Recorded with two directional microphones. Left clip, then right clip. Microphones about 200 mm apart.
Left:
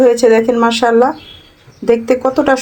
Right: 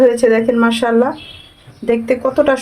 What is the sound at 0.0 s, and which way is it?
Speech, 15° left (ahead or behind).